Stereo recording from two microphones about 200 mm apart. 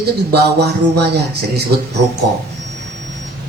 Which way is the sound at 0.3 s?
55° right (ahead or behind).